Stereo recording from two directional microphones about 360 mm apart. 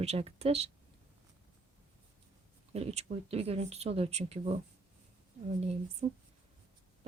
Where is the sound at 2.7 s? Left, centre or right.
Centre.